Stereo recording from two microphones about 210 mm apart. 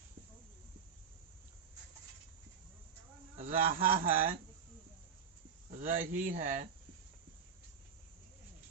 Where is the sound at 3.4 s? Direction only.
40° right (ahead or behind).